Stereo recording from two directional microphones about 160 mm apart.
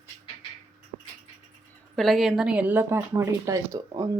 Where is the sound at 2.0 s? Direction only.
Centre (ahead or behind).